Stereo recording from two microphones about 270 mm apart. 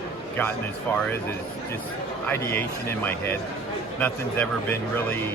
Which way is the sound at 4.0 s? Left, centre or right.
Centre.